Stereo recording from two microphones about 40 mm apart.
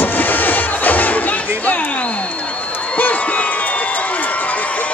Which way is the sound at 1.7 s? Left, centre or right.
Left.